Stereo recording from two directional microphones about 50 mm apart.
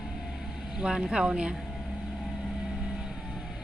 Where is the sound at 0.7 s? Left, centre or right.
Centre.